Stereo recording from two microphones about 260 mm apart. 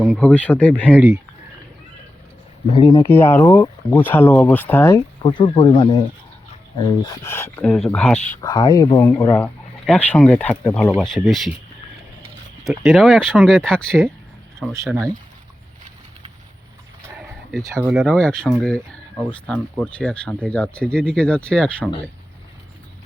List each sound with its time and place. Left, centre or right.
0.1 s speech: centre
0.9 s speech: centre
2.6 s speech: centre
7.0 s speech: centre
12.6 s speech: centre
17.6 s speech: centre